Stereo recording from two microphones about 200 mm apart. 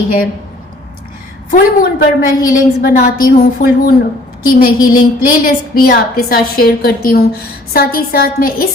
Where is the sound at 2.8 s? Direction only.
45° left (ahead or behind).